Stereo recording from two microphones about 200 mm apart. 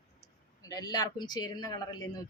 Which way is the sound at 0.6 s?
15° left (ahead or behind).